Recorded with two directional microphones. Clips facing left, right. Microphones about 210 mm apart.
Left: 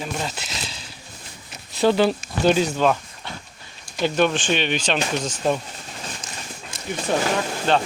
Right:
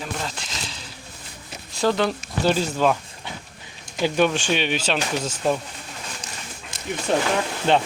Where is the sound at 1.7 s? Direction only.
5° left (ahead or behind).